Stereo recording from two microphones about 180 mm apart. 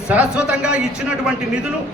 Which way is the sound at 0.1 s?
5° right (ahead or behind).